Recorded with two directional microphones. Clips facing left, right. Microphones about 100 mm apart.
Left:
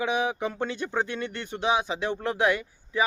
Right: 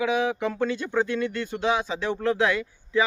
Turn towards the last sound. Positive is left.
turn(degrees=15)  # may be behind; listen again after turning